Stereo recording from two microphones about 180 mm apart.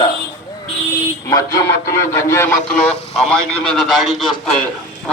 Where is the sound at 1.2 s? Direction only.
20° left (ahead or behind).